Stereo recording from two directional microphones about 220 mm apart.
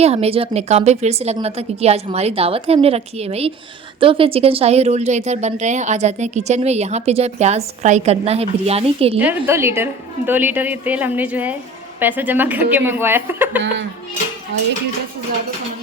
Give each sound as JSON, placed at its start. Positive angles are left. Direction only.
{"t": 0.0, "sound": "speech", "side_deg": -30}
{"t": 9.1, "sound": "a woman's voice", "side_deg": -10}
{"t": 13.6, "sound": "speech", "side_deg": -55}